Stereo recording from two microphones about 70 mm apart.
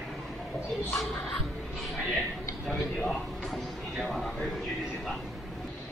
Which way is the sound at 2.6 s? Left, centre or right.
Centre.